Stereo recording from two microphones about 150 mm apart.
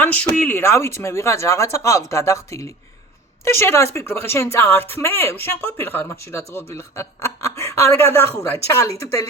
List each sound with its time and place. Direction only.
0.0 s a woman's voice: 10° left (ahead or behind)